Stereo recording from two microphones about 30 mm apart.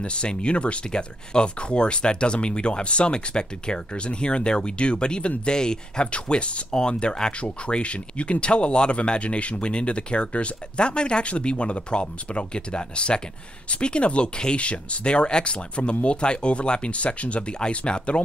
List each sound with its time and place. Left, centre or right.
0.0 s speech: left
6.2 s speech: left
9.2 s speech: left
14.6 s speech: left
16.9 s speech: left